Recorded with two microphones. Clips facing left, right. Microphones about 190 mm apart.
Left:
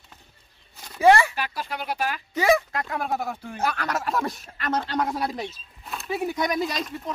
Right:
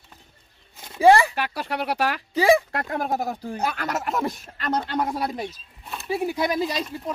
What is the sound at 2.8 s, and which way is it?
Speech, 40° right (ahead or behind).